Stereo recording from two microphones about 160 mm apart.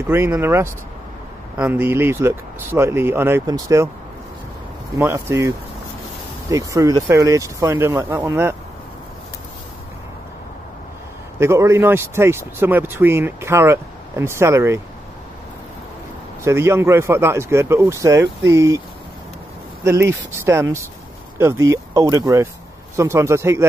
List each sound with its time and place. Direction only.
0.0 s speech: 15° right (ahead or behind)
4.9 s speech: 20° right (ahead or behind)
6.5 s speech: 20° right (ahead or behind)
11.3 s speech: 15° right (ahead or behind)
16.4 s speech: 15° right (ahead or behind)
19.8 s speech: 15° right (ahead or behind)